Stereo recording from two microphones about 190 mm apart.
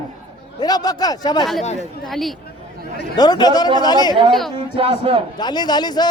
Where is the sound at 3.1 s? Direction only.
20° left (ahead or behind).